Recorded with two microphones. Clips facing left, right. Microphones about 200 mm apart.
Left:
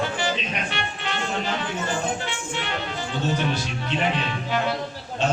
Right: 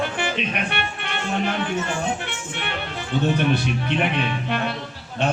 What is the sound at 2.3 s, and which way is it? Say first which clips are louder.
A man's voice: left 1 dB; 60° right (ahead or behind).